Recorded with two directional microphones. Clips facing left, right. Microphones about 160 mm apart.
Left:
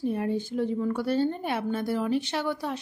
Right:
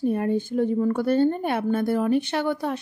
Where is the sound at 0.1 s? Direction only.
50° right (ahead or behind).